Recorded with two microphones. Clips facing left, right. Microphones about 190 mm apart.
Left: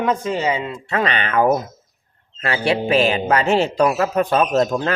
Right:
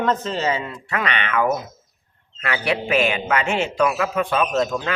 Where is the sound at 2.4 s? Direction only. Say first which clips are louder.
Left 4 dB; 30° left (ahead or behind).